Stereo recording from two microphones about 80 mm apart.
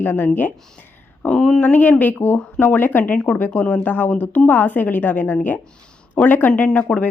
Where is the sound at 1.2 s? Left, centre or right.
Centre.